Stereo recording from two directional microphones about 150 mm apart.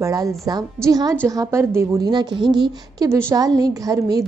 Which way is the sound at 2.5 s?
30° right (ahead or behind).